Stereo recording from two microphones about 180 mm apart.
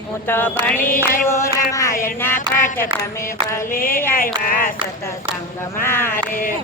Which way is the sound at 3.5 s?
15° left (ahead or behind).